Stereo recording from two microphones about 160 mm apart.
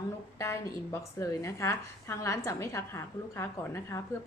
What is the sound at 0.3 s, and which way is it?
Speech, 15° left (ahead or behind).